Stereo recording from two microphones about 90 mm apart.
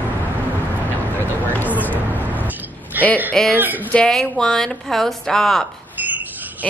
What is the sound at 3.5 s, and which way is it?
Speech, 20° right (ahead or behind).